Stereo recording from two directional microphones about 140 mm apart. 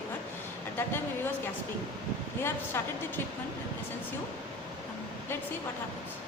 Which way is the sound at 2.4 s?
15° left (ahead or behind).